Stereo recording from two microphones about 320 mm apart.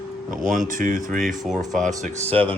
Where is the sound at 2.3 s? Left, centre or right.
Centre.